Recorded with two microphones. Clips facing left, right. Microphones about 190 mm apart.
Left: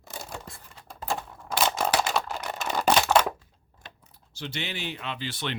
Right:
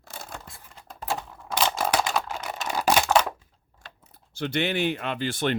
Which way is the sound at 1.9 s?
5° left (ahead or behind).